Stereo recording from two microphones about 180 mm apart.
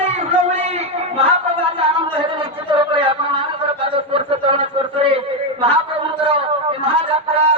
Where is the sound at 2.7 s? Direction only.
30° right (ahead or behind).